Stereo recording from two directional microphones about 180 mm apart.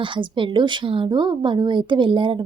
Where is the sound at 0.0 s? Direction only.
25° right (ahead or behind).